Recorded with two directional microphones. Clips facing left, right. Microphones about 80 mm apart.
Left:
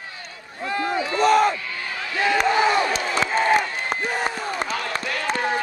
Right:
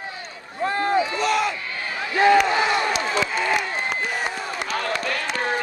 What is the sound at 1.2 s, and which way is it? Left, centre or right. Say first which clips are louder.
Crowd: left 5 dB; left.